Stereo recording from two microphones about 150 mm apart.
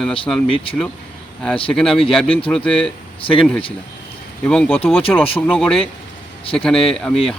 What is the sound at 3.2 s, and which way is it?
Speech, 35° left (ahead or behind).